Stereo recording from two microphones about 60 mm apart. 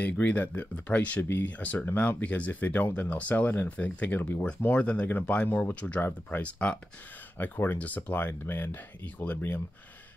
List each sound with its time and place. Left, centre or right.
0.0 s speech: left
4.7 s speech: left
7.3 s speech: left